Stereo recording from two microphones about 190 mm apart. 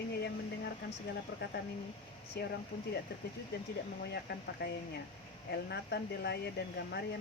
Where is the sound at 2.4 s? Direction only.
55° left (ahead or behind).